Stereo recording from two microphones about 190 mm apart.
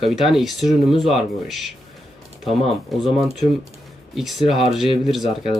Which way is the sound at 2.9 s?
Centre (ahead or behind).